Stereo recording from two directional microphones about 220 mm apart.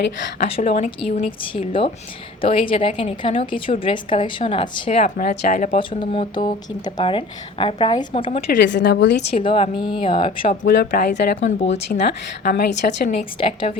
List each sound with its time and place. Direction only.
0.3 s speech: 30° left (ahead or behind)
5.9 s speech: 25° left (ahead or behind)
8.4 s a woman's voice: 50° left (ahead or behind)
9.3 s speech: 25° left (ahead or behind)
10.6 s a woman's voice: 55° left (ahead or behind)
11.4 s speech: 30° left (ahead or behind)
11.9 s a woman's voice: 45° left (ahead or behind)
13.4 s speech: 25° left (ahead or behind)